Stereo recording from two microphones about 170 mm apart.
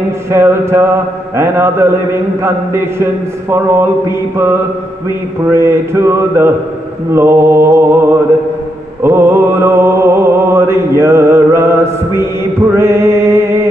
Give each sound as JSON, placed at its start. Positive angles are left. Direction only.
{"t": 0.3, "sound": "mantra", "side_deg": -15}
{"t": 5.5, "sound": "mantra", "side_deg": -15}
{"t": 9.0, "sound": "mantra", "side_deg": -15}